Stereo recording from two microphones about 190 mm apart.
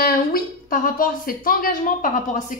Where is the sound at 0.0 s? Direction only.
50° left (ahead or behind).